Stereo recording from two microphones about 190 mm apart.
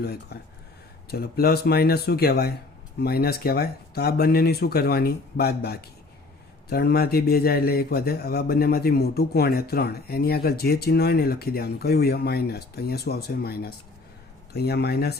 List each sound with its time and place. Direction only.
0.0 s a man's voice: 60° left (ahead or behind)